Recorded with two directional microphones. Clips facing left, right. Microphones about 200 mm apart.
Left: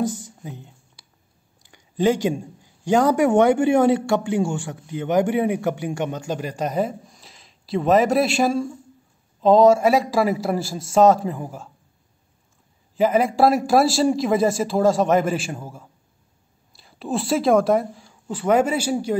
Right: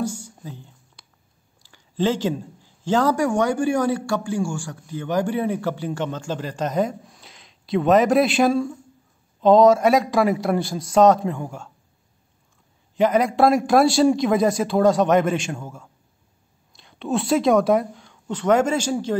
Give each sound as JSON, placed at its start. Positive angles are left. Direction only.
{"t": 0.4, "sound": "a sound", "side_deg": 20}
{"t": 1.6, "sound": "a man's voice", "side_deg": 15}
{"t": 12.9, "sound": "a man's voice", "side_deg": 5}